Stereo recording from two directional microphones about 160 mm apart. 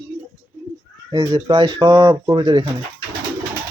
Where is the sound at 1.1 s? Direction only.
30° right (ahead or behind).